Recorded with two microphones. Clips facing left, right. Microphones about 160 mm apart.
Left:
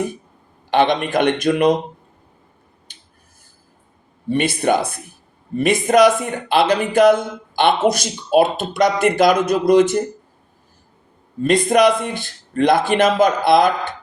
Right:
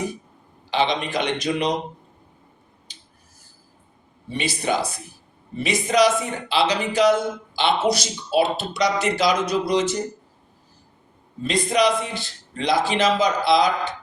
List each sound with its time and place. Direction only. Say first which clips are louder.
0.7 s a man's voice: left 6 dB; 55° left (ahead or behind)
2.9 s finger snapping: right 2 dB; 55° left (ahead or behind)
4.3 s a man's voice: left 7 dB; 55° left (ahead or behind)
11.4 s speech: left 6 dB; 55° left (ahead or behind)